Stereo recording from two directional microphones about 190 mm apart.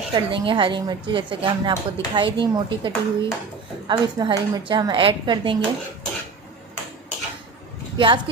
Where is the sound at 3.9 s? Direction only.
20° right (ahead or behind).